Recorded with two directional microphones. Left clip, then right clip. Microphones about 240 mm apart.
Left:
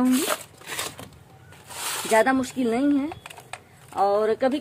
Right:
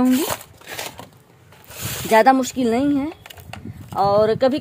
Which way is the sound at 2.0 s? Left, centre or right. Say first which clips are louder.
Right 7 dB; right.